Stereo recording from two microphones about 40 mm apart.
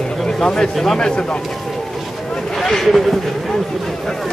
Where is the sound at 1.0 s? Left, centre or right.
Centre.